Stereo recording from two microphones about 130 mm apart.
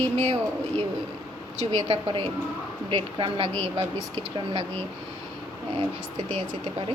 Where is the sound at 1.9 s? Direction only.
40° right (ahead or behind).